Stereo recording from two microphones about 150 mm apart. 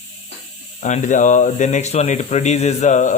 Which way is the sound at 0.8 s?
55° left (ahead or behind).